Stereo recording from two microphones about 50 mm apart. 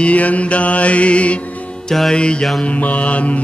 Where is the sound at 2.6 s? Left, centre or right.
Left.